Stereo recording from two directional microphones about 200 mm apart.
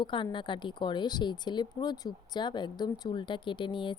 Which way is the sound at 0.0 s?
25° left (ahead or behind).